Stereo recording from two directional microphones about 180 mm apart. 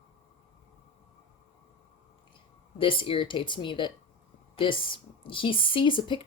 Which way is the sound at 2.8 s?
30° left (ahead or behind).